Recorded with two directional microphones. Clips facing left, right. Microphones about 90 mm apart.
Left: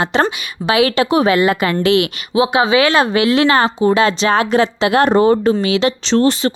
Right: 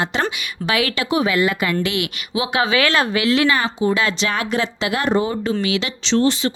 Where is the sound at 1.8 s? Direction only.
90° left.